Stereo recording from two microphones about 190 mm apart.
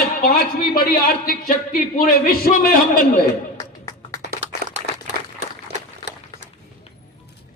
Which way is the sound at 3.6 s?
20° left (ahead or behind).